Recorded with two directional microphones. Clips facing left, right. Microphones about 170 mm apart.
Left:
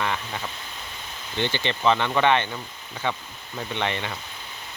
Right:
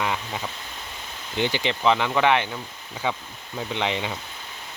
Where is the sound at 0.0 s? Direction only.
10° right (ahead or behind).